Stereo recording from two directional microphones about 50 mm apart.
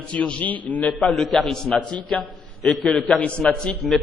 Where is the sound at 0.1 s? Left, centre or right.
Left.